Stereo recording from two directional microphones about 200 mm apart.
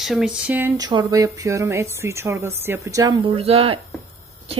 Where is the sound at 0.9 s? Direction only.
20° right (ahead or behind).